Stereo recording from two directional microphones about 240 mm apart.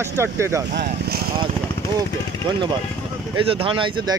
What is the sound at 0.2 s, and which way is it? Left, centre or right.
Speech, centre.